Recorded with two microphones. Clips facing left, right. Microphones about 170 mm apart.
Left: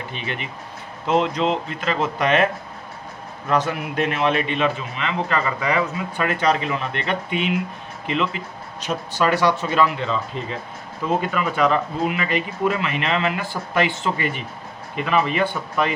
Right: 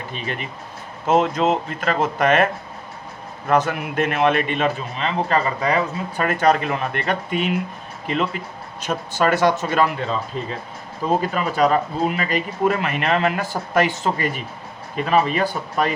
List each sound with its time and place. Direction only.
0.1 s a man's voice: 40° right (ahead or behind)
3.5 s a man's voice: 50° right (ahead or behind)
11.2 s speech: 35° right (ahead or behind)